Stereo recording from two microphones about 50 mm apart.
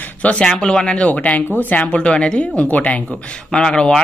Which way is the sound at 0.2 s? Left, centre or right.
Left.